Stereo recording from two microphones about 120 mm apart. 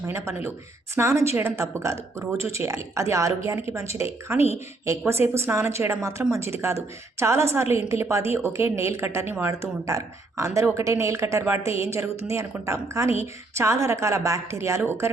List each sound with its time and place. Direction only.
0.9 s speech: 25° right (ahead or behind)